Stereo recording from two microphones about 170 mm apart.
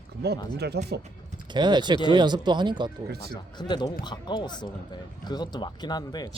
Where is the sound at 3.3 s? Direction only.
25° left (ahead or behind).